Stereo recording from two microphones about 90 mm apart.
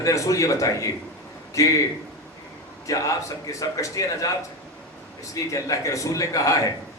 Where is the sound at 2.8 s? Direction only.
40° left (ahead or behind).